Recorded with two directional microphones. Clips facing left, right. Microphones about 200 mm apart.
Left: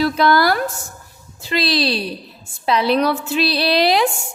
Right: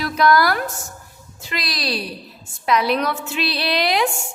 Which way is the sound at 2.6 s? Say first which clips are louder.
Left 3 dB; 30° left (ahead or behind).